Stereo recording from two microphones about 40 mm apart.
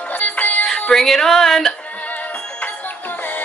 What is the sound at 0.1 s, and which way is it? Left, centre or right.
Music, left.